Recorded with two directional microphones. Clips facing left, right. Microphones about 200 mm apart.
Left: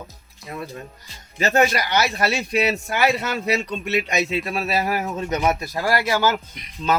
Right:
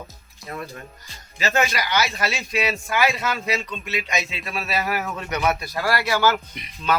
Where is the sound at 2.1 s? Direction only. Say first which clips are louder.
Left 4 dB; 45° left (ahead or behind).